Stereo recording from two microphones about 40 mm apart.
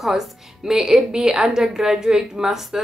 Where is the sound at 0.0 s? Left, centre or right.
Centre.